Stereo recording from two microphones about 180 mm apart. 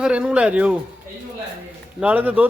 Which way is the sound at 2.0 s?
10° right (ahead or behind).